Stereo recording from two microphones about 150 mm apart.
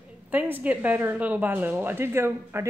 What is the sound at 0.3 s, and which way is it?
Speech, 10° right (ahead or behind).